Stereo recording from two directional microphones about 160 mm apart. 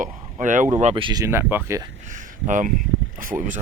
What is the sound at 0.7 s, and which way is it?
Speech, 35° right (ahead or behind).